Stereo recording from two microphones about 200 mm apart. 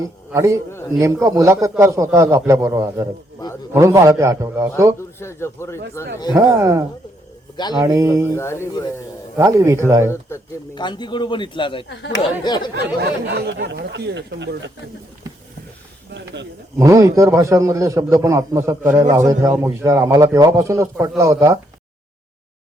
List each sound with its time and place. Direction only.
0.3 s a man's voice: 15° right (ahead or behind)
5.2 s speech: 15° left (ahead or behind)
6.3 s a man's voice: 15° right (ahead or behind)
7.5 s a man's voice: 20° left (ahead or behind)
7.8 s a man's voice: 15° right (ahead or behind)
8.3 s speech: 15° left (ahead or behind)
9.3 s a man's voice: 15° right (ahead or behind)
10.1 s speech: 15° left (ahead or behind)
11.9 s speech: 65° left (ahead or behind)
12.5 s speech: 20° left (ahead or behind)
13.0 s speech: 60° right (ahead or behind)
16.1 s speech: 60° right (ahead or behind)
16.7 s a man's voice: 15° right (ahead or behind)